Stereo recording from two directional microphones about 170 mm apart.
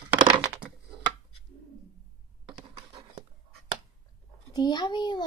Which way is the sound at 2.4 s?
30° right (ahead or behind).